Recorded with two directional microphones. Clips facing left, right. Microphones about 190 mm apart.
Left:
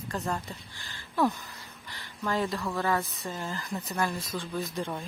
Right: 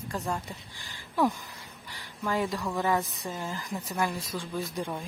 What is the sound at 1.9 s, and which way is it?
Speech, 10° right (ahead or behind).